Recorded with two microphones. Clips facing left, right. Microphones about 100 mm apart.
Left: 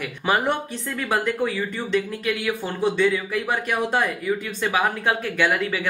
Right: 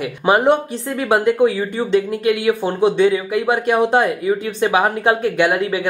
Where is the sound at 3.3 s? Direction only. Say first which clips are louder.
Right 8 dB; 25° right (ahead or behind).